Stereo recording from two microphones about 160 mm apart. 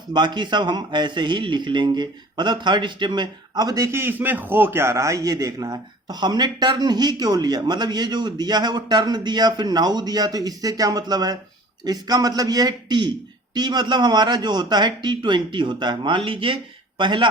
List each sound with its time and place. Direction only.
0.1 s a man's voice: 30° right (ahead or behind)